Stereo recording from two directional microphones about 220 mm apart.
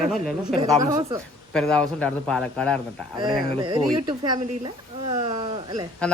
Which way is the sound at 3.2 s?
20° right (ahead or behind).